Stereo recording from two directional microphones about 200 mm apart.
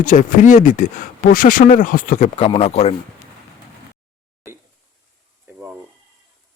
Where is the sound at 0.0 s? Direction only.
40° left (ahead or behind).